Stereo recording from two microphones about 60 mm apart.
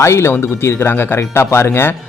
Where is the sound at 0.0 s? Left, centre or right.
Left.